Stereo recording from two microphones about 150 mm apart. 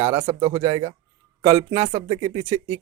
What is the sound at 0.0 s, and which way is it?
A man's voice, 40° right (ahead or behind).